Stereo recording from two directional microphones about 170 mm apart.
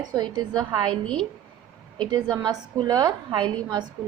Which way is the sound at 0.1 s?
25° right (ahead or behind).